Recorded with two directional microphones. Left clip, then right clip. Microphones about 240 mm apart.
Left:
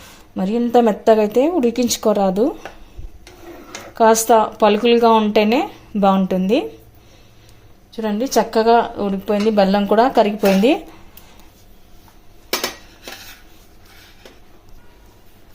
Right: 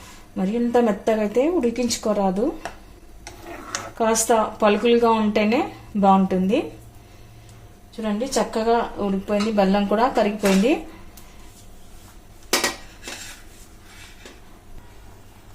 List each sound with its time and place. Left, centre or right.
0.3 s a woman's voice: left
3.9 s a woman's voice: left
8.0 s a woman's voice: left